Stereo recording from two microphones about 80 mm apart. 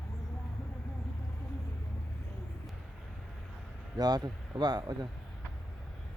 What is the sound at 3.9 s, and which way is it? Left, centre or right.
Speech, right.